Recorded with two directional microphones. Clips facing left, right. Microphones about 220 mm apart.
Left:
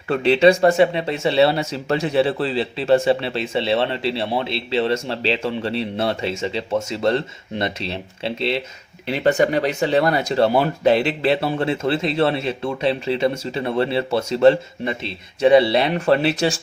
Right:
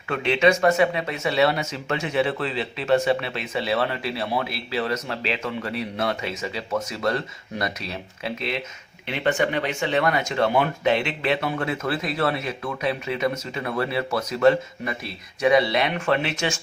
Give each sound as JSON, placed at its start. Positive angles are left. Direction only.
{"t": 0.1, "sound": "speech", "side_deg": 35}